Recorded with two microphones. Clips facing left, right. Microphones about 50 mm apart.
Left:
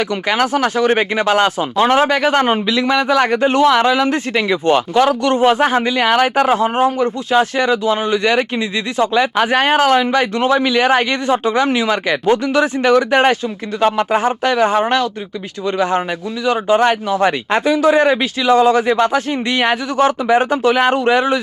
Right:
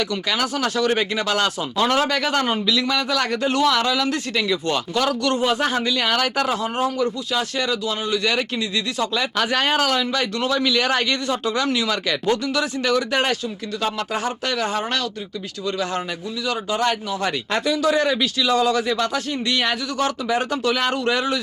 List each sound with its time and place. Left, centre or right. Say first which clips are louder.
0.0 s speech: left 6 dB; left